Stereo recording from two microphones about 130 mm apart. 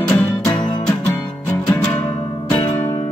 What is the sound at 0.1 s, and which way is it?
Music, 5° left (ahead or behind).